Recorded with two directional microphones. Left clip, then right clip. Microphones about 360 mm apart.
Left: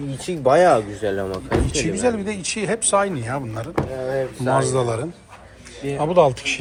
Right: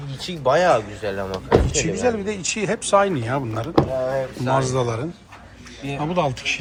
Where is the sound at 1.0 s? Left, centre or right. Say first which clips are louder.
Left 3 dB; left.